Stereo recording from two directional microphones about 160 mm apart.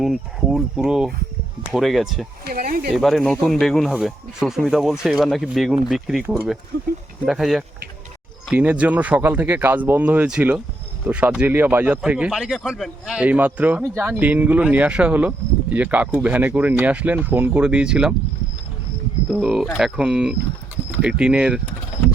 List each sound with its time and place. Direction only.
0.0 s speech: centre (ahead or behind)
2.4 s speech: 70° right (ahead or behind)
2.9 s speech: centre (ahead or behind)
7.3 s speech: centre (ahead or behind)
19.3 s speech: 5° right (ahead or behind)